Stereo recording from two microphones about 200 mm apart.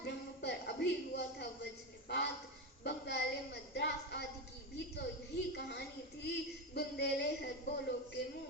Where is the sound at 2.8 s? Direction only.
55° left (ahead or behind).